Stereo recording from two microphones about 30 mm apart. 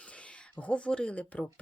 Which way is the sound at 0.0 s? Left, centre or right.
Left.